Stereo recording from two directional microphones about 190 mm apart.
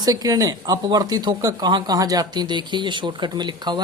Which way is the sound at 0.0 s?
20° right (ahead or behind).